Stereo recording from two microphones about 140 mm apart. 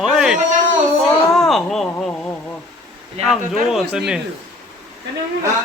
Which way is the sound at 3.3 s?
Centre (ahead or behind).